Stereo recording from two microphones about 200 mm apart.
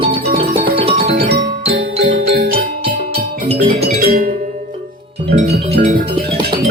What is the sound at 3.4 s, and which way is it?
Music, 30° right (ahead or behind).